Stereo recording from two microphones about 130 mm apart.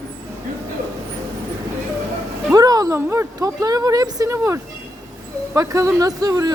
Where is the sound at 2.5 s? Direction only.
30° right (ahead or behind).